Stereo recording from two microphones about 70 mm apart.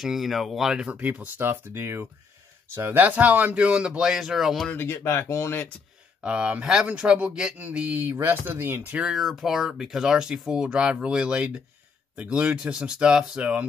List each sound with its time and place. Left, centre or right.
0.0 s speech: centre
0.8 s speech: right; by 4.6 s centre
4.7 s speech: left
6.2 s speech: centre
7.5 s speech: right
8.9 s speech: centre